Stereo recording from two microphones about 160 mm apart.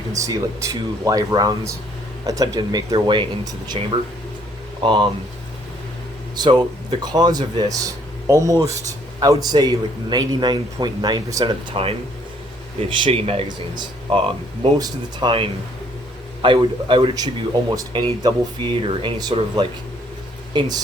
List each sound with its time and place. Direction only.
0.1 s speech: 20° right (ahead or behind)
4.8 s speech: 30° right (ahead or behind)
6.3 s a man's voice: 25° right (ahead or behind)
11.8 s speech: 35° right (ahead or behind)
20.5 s speech: 25° right (ahead or behind)